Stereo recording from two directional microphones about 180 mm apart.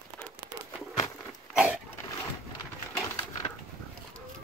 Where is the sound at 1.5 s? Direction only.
5° right (ahead or behind).